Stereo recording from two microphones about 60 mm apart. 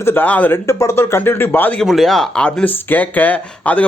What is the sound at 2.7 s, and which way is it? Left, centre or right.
Speech, left.